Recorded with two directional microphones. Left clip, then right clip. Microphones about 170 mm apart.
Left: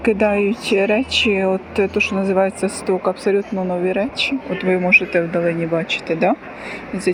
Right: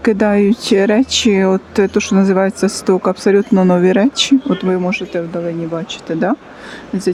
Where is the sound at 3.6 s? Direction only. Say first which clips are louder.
Right 7 dB; 55° right (ahead or behind).